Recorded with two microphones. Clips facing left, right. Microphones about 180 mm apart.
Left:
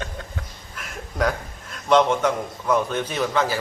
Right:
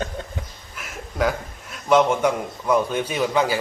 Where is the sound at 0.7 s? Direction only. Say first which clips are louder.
Right 1 dB; 5° right (ahead or behind).